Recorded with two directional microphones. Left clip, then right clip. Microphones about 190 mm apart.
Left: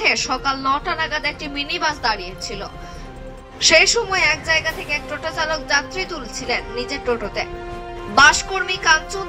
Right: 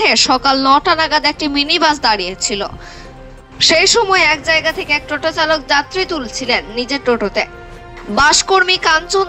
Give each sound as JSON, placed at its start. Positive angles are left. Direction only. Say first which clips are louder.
{"t": 0.0, "sound": "a woman's voice", "louder": "right 7 dB", "side_deg": -50}